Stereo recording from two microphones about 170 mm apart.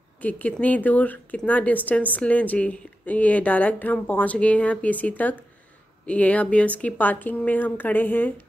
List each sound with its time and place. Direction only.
0.2 s a woman's voice: 10° left (ahead or behind)